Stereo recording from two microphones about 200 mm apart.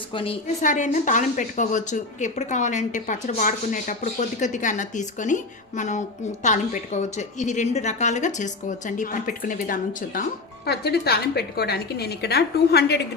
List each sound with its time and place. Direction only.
0.1 s a woman's voice: 25° left (ahead or behind)
0.6 s speech: 40° left (ahead or behind)
10.7 s a woman's voice: 55° left (ahead or behind)